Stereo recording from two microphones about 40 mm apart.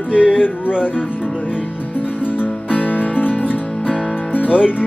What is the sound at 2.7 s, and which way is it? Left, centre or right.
Music, left.